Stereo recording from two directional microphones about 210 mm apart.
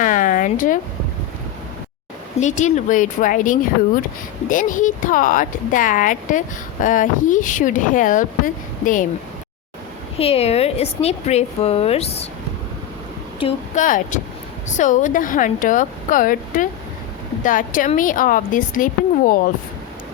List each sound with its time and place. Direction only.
0.0 s a sound: 40° left (ahead or behind)
2.4 s a woman's voice: 35° left (ahead or behind)
10.2 s a woman's voice: 30° left (ahead or behind)
13.7 s a woman's voice: 40° left (ahead or behind)